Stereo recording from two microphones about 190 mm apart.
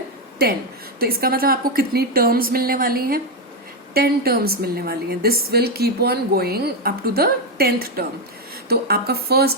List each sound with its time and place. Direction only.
0.9 s a woman's voice: 55° right (ahead or behind)